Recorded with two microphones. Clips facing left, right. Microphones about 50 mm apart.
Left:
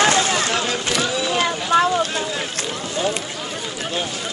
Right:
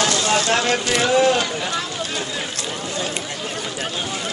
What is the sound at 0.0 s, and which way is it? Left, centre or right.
Vehicle, left.